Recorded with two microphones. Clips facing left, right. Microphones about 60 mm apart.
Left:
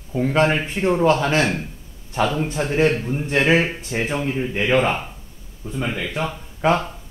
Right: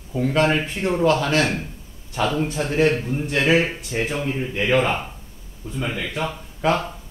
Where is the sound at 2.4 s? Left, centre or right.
Left.